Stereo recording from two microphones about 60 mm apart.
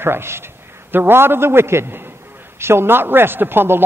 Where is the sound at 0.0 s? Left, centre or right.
Right.